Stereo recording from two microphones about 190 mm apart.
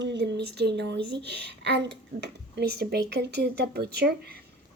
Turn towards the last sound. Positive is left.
turn(degrees=-55)  # may be behind; listen again after turning